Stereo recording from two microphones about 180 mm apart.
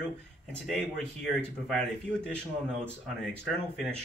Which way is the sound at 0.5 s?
Centre (ahead or behind).